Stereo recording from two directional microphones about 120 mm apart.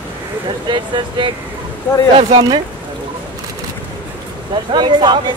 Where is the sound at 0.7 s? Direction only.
40° right (ahead or behind).